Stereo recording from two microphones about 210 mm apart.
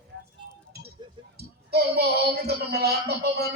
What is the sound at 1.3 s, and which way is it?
Speech, 50° right (ahead or behind).